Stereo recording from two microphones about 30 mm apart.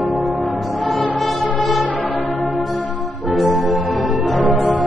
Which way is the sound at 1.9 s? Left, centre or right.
Left.